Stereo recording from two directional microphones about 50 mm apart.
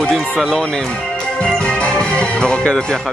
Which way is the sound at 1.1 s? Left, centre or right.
Centre.